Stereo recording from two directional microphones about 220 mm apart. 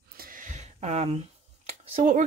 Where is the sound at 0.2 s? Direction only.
40° right (ahead or behind).